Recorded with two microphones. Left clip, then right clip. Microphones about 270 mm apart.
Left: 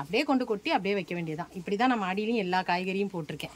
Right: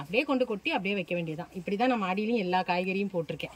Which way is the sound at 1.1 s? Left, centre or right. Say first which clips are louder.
Right 2 dB; left.